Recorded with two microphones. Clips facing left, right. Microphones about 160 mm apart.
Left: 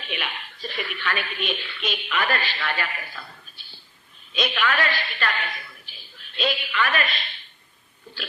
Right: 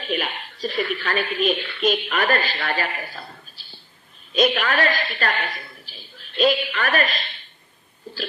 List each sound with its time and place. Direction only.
0.1 s speech: 40° right (ahead or behind)
4.4 s a woman's voice: 40° right (ahead or behind)
6.3 s a woman's voice: 45° right (ahead or behind)